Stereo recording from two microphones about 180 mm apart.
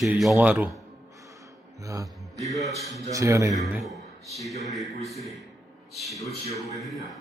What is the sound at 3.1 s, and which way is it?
Speech, 15° right (ahead or behind).